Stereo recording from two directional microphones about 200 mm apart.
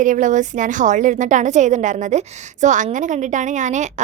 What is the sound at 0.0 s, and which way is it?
A woman's voice, 40° right (ahead or behind).